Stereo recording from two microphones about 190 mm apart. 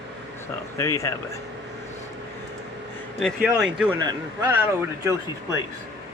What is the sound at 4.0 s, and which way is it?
Speech, 20° right (ahead or behind).